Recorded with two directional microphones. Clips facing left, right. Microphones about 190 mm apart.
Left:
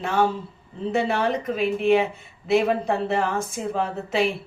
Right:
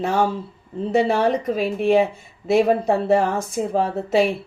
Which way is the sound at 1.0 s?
40° right (ahead or behind).